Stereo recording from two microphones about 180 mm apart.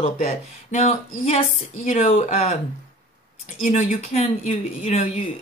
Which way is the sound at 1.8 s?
50° left (ahead or behind).